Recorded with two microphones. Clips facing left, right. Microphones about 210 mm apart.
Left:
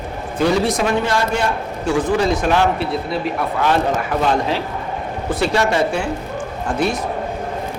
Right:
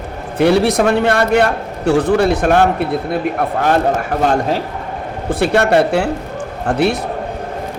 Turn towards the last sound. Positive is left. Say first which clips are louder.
# right 4 dB
turn(degrees=-70)  # may be behind; listen again after turning